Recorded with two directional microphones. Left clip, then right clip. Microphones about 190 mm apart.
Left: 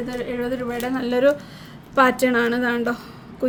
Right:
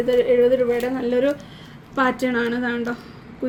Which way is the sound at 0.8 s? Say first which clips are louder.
Right 1 dB; 70° left (ahead or behind).